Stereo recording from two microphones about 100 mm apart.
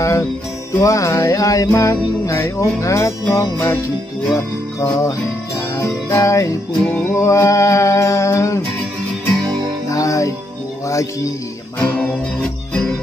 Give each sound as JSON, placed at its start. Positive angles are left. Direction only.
{"t": 0.0, "sound": "music", "side_deg": 25}
{"t": 6.9, "sound": "music", "side_deg": 20}
{"t": 7.2, "sound": "music", "side_deg": 30}
{"t": 9.8, "sound": "music", "side_deg": 35}